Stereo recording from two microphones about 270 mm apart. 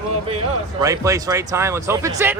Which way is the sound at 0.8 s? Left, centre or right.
Centre.